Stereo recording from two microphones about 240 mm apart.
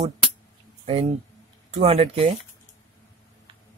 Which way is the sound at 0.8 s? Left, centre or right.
Right.